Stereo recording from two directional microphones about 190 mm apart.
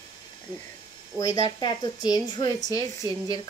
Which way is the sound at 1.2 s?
20° left (ahead or behind).